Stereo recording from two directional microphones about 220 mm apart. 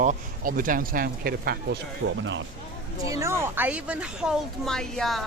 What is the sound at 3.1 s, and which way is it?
A woman's voice, 15° right (ahead or behind).